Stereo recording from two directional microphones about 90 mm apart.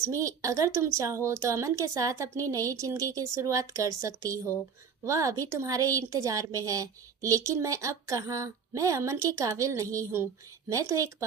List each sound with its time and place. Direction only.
0.0 s a woman's voice: 35° right (ahead or behind)